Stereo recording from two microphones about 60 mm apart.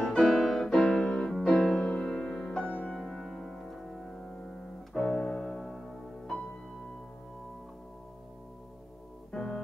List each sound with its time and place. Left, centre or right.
0.0 s music: centre
5.0 s keyboard: centre
5.6 s music: centre
9.3 s music: centre